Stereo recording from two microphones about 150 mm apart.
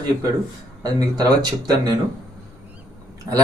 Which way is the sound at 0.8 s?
25° right (ahead or behind).